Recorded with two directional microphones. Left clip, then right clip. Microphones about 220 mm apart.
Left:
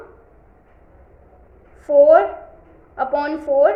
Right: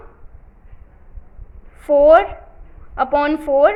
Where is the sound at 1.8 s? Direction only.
40° right (ahead or behind).